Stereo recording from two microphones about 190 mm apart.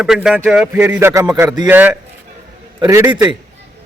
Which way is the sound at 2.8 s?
20° right (ahead or behind).